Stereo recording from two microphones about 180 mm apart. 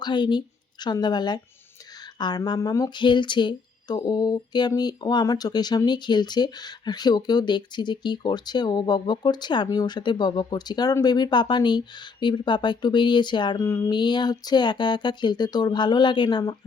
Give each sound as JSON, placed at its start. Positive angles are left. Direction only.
{"t": 0.0, "sound": "a woman's voice", "side_deg": 25}